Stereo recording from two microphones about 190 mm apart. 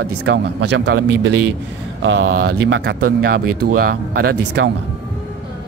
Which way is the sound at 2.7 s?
60° right (ahead or behind).